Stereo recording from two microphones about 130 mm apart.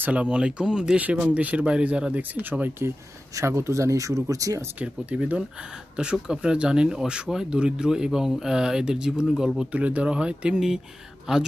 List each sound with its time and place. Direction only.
0.0 s speech: 10° right (ahead or behind); by 4.6 s 25° right (ahead or behind)
4.7 s speech: 10° right (ahead or behind)